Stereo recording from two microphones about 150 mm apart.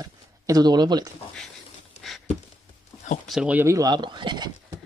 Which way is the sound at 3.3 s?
5° right (ahead or behind).